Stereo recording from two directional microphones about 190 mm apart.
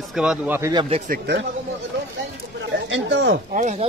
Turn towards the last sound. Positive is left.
turn(degrees=-40)  # may be behind; listen again after turning